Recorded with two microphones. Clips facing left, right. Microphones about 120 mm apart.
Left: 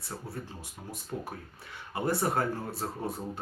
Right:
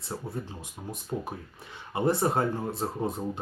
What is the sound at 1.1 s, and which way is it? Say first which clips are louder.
Speech: right 4 dB; 20° right (ahead or behind).